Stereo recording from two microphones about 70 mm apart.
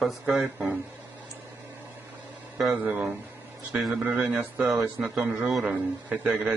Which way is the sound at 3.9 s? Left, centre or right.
Centre.